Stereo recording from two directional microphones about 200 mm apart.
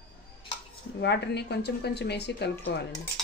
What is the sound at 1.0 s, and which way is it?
A woman's voice, 60° left (ahead or behind).